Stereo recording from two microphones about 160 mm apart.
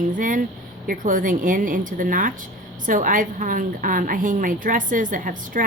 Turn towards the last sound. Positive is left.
turn(degrees=-60)  # may be behind; listen again after turning